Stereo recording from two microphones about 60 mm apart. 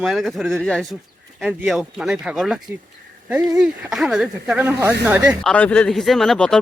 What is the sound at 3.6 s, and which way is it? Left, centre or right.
Speech, centre.